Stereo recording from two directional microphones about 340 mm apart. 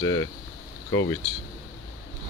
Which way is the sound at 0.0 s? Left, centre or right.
Centre.